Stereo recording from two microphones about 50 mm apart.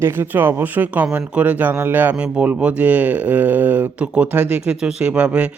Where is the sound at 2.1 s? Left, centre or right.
Right.